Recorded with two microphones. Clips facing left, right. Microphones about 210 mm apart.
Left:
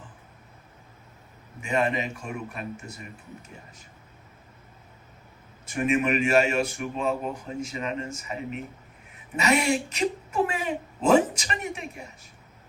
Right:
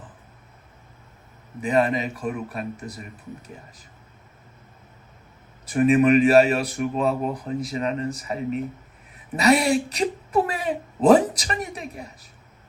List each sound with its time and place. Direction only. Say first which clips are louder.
1.6 s speech: right 5 dB; 35° right (ahead or behind)
5.6 s speech: right 7 dB; 35° right (ahead or behind)